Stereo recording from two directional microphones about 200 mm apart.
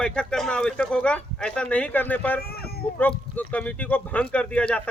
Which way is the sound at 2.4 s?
50° left (ahead or behind).